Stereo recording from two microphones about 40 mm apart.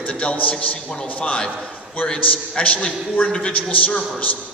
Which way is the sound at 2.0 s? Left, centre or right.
Left.